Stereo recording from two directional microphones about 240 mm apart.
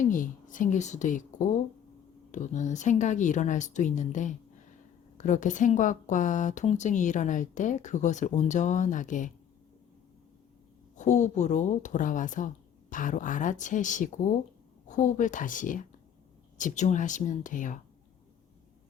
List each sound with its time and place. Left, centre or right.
0.0 s speech: left
2.3 s speech: left
10.9 s speech: left